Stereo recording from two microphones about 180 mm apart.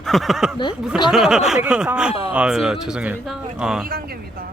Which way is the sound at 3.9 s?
55° right (ahead or behind).